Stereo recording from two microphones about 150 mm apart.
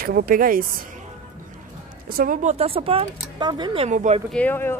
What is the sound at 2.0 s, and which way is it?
Speech, 75° right (ahead or behind).